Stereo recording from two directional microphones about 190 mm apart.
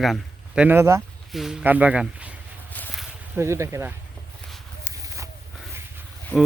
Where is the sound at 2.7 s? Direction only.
10° left (ahead or behind).